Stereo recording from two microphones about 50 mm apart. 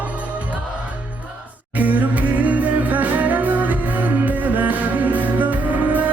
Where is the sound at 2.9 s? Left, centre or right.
Right.